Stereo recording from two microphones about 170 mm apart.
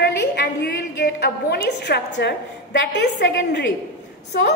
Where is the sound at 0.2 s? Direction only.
80° left.